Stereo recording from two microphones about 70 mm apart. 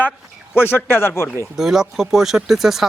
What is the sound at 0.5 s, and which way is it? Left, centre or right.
Speech, left.